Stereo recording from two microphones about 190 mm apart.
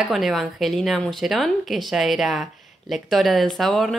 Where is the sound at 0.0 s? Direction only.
Centre (ahead or behind).